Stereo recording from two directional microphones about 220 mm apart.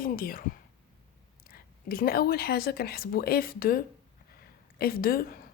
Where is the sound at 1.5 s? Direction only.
40° left (ahead or behind).